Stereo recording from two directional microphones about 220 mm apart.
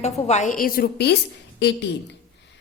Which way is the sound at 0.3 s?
35° left (ahead or behind).